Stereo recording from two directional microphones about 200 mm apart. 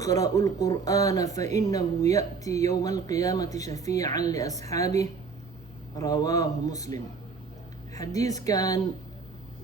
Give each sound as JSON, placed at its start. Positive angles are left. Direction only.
{"t": 0.0, "sound": "speech", "side_deg": 15}